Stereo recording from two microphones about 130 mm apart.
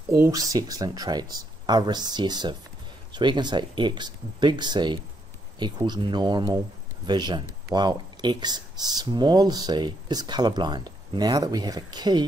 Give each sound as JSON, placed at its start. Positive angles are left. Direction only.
{"t": 0.1, "sound": "speech", "side_deg": -25}